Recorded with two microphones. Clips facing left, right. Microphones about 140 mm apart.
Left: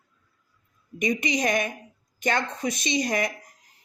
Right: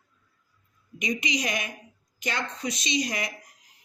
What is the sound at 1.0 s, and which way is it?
Speech, 50° left (ahead or behind).